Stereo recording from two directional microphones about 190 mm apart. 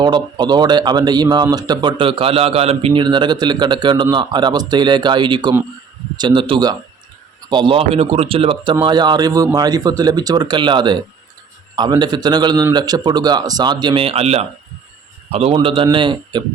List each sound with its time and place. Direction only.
0.0 s speech: 20° right (ahead or behind)